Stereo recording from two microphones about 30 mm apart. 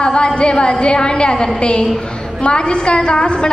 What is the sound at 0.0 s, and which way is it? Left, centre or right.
A woman's voice, left.